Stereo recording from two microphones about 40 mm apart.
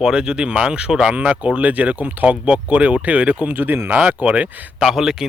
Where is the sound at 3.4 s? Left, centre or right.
Right.